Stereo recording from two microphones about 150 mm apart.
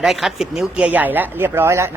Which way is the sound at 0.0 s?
5° right (ahead or behind).